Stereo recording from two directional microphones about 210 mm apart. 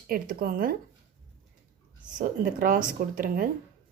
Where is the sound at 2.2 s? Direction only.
40° right (ahead or behind).